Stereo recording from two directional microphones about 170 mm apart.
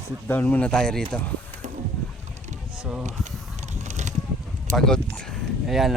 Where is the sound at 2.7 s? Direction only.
5° right (ahead or behind).